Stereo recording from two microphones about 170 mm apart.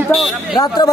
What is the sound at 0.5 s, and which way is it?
Speech, 25° left (ahead or behind).